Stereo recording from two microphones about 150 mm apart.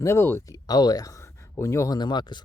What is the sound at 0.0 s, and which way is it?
Speech, 15° left (ahead or behind).